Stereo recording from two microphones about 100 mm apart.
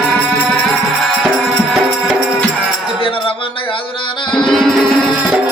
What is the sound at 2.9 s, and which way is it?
Speech, 60° left (ahead or behind).